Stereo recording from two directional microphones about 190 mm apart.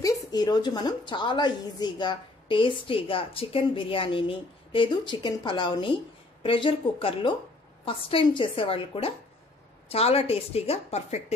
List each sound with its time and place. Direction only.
0.3 s a woman's voice: 20° left (ahead or behind)